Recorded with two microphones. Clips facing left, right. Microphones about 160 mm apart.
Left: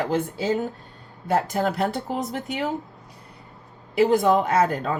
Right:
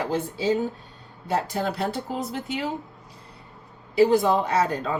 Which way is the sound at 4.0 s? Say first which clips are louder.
Even; 50° left (ahead or behind).